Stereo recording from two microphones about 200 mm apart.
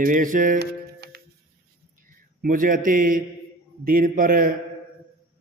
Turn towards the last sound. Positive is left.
turn(degrees=-45)  # may be behind; listen again after turning